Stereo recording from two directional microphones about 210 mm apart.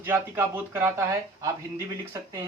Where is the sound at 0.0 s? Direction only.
10° right (ahead or behind).